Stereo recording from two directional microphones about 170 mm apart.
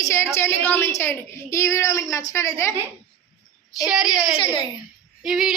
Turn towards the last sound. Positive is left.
turn(degrees=-5)  # may be behind; listen again after turning